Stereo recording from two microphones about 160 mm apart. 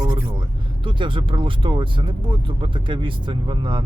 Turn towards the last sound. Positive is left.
turn(degrees=-30)  # may be behind; listen again after turning